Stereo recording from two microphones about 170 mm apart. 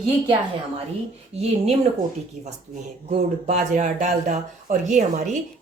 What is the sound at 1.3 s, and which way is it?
Speech, 40° right (ahead or behind).